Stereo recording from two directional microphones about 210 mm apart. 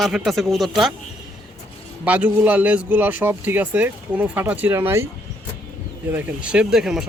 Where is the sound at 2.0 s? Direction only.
5° right (ahead or behind).